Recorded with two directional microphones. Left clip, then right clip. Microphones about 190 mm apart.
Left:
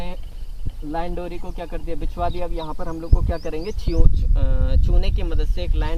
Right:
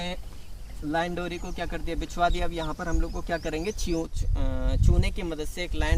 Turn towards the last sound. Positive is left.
turn(degrees=-50)  # may be behind; listen again after turning